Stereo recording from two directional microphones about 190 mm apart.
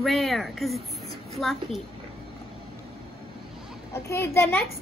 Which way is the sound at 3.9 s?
15° left (ahead or behind).